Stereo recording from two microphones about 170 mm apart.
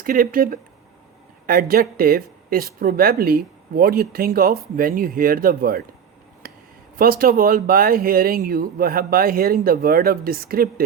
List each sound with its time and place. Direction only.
0.0 s speech: 55° right (ahead or behind)
6.4 s a sound: 60° right (ahead or behind)
6.9 s speech: 60° right (ahead or behind)